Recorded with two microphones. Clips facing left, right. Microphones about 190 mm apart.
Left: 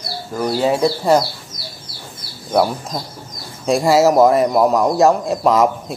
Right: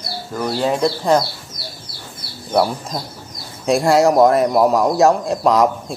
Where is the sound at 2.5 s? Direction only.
Centre (ahead or behind).